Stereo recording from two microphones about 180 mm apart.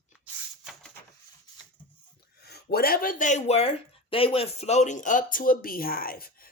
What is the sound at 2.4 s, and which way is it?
Speech, 65° left (ahead or behind).